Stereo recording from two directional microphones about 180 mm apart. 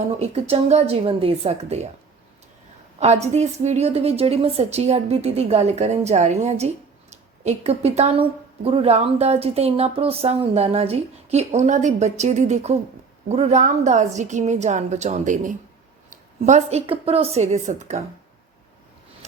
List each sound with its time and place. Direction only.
0.2 s a woman's voice: 35° right (ahead or behind)
3.0 s a woman's voice: 40° right (ahead or behind)